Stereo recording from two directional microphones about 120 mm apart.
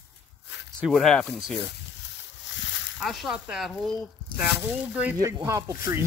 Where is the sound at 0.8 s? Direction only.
5° left (ahead or behind).